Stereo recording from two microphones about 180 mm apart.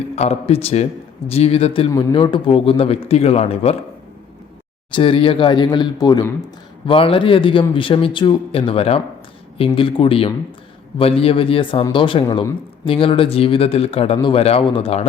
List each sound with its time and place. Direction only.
0.2 s speech: 35° left (ahead or behind)
1.9 s speech: 20° left (ahead or behind)
4.9 s speech: 30° left (ahead or behind)